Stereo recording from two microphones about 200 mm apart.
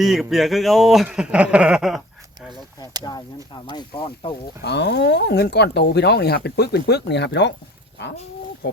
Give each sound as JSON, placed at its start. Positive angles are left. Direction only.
{"t": 0.0, "sound": "speech", "side_deg": 0}
{"t": 3.0, "sound": "speech", "side_deg": 20}
{"t": 4.6, "sound": "speech", "side_deg": 55}